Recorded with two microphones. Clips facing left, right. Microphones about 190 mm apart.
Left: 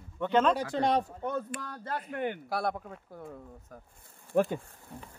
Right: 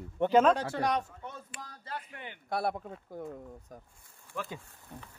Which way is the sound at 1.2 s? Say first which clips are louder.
Left 11 dB; 60° left (ahead or behind).